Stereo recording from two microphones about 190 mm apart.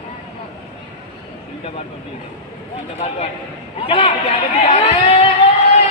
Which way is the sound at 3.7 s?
30° left (ahead or behind).